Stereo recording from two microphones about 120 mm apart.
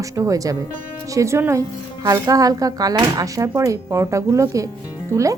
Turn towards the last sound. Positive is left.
turn(degrees=-25)  # may be behind; listen again after turning